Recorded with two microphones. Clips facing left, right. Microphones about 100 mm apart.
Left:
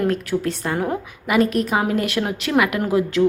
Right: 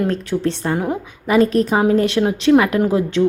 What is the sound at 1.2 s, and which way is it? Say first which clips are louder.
A woman's voice: right 4 dB; 30° right (ahead or behind).